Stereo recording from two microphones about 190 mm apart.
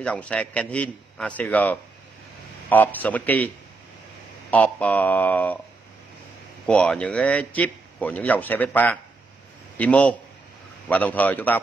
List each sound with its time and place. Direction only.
0.0 s a man's voice: 5° left (ahead or behind)
6.6 s a man's voice: 5° left (ahead or behind)